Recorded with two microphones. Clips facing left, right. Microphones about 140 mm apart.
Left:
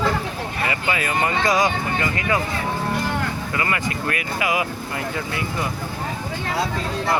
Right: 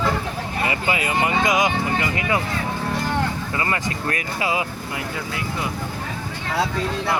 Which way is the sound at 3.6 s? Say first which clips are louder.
Even; 30° right (ahead or behind).